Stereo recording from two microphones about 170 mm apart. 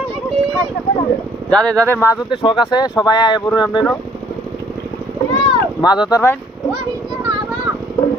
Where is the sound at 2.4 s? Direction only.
30° left (ahead or behind).